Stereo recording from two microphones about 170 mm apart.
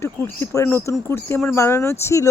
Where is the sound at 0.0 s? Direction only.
15° left (ahead or behind).